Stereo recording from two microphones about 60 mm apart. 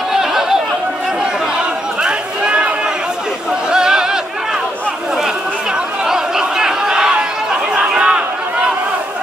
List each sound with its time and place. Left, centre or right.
0.1 s chatter: centre
2.0 s run: centre
3.7 s a sound: centre
6.0 s chatter: centre